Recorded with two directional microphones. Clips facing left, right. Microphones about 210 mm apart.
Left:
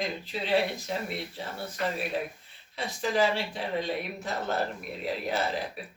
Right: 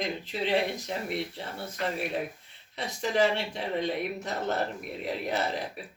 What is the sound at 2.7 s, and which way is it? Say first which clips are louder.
Speech: even; 20° right (ahead or behind).